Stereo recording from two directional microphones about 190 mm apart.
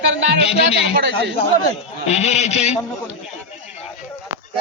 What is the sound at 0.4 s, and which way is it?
Speech, 30° left (ahead or behind).